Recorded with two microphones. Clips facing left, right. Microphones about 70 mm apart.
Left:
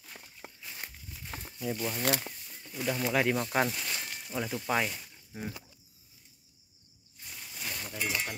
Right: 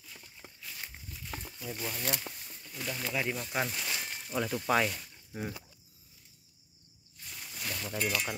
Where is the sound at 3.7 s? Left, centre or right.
Centre.